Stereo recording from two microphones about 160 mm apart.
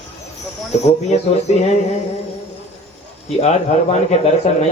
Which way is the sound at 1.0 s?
45° left (ahead or behind).